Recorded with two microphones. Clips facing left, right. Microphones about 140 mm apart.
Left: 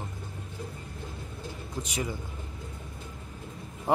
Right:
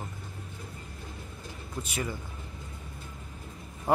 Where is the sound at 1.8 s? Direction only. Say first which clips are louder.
Left 1 dB; 15° left (ahead or behind).